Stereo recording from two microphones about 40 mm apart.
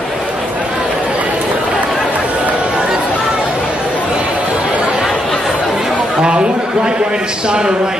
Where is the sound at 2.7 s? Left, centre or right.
Right.